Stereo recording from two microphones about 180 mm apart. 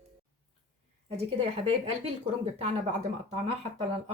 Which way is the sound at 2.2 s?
35° right (ahead or behind).